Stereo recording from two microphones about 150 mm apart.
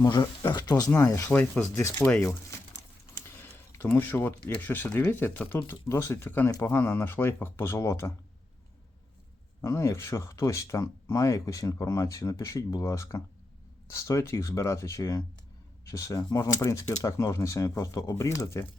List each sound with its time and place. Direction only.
0.0 s speech: 25° left (ahead or behind)
3.2 s a sound: 15° left (ahead or behind)
3.8 s speech: 10° left (ahead or behind)
9.6 s speech: 20° left (ahead or behind)